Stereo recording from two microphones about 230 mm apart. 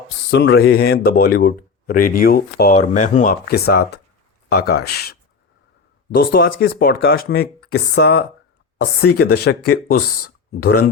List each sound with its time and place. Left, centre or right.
0.3 s speech: left
6.1 s speech: left